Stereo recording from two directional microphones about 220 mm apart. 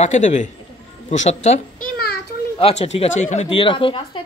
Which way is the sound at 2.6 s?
25° left (ahead or behind).